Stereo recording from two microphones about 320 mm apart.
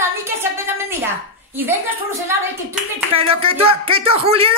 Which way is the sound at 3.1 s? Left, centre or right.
Centre.